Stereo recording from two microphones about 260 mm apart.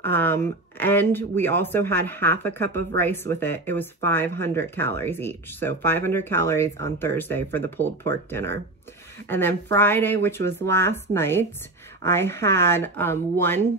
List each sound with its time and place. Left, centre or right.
0.0 s speech: centre